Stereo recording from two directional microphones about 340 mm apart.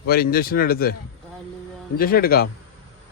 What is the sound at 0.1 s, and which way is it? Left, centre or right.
Speech, left.